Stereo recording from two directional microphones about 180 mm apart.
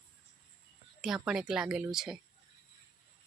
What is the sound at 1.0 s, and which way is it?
Speech, 5° right (ahead or behind).